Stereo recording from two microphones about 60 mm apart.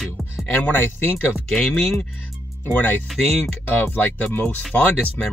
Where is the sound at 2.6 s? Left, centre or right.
Left.